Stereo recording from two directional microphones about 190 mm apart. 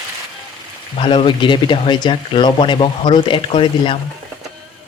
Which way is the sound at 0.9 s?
30° left (ahead or behind).